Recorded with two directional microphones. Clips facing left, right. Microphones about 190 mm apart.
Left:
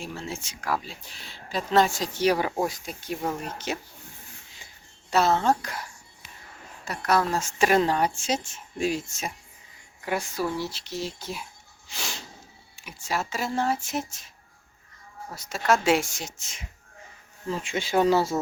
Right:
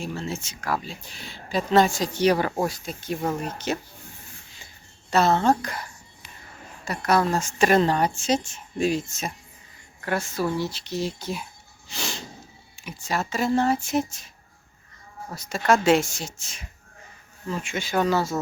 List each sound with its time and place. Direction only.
0.0 s speech: 10° left (ahead or behind)
5.1 s speech: 5° left (ahead or behind)
11.9 s snort: 10° left (ahead or behind)
12.8 s speech: 5° left (ahead or behind)
15.4 s speech: 5° left (ahead or behind); by 16.6 s 20° left (ahead or behind)
17.5 s speech: 30° left (ahead or behind)